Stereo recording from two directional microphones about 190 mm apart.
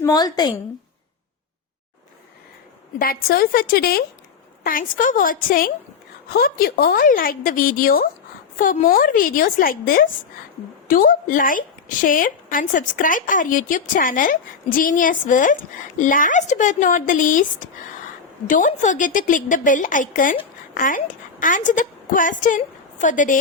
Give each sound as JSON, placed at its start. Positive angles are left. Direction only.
{"t": 0.0, "sound": "speech", "side_deg": 20}
{"t": 3.0, "sound": "a woman's voice", "side_deg": 50}